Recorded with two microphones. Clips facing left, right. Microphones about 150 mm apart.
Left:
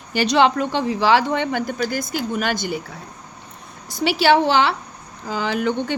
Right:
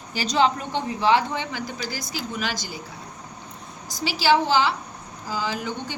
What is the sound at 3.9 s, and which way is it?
A woman's voice, 60° left (ahead or behind).